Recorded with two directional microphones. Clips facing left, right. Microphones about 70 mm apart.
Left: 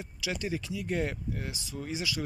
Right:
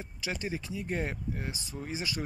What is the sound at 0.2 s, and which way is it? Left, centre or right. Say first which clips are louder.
Speech: left 2 dB; right.